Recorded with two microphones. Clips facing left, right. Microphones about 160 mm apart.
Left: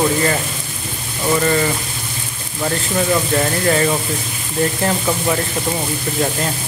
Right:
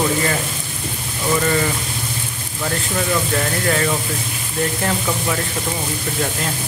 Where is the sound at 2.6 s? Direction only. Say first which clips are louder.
Left 3 dB; 15° left (ahead or behind).